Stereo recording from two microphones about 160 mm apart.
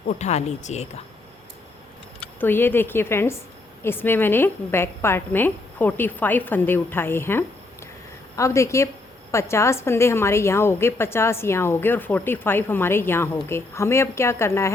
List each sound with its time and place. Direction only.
0.2 s speech: 45° left (ahead or behind)
2.4 s a woman's voice: 15° left (ahead or behind)